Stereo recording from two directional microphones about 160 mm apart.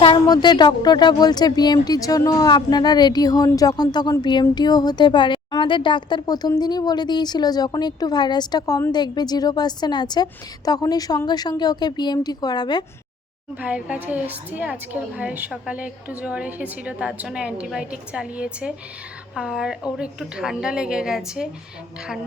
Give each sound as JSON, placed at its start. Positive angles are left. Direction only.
{"t": 0.0, "sound": "speech", "side_deg": 30}
{"t": 13.6, "sound": "a woman's voice", "side_deg": -10}